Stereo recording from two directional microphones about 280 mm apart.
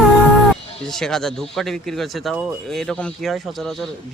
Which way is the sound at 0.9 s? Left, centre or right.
Centre.